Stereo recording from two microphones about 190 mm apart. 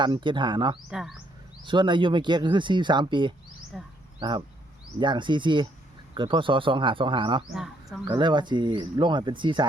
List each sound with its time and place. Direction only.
0.0 s speech: 25° right (ahead or behind)
0.9 s a man's voice: 5° right (ahead or behind)
1.6 s speech: 25° right (ahead or behind)
3.7 s a man's voice: centre (ahead or behind)
4.2 s speech: 25° right (ahead or behind)
7.5 s a man's voice: centre (ahead or behind)
8.0 s speech: 25° right (ahead or behind)